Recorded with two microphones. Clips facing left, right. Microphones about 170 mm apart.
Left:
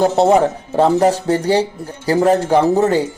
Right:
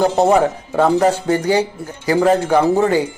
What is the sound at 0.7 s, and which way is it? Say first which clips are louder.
Speech: left 1 dB; 30° left (ahead or behind).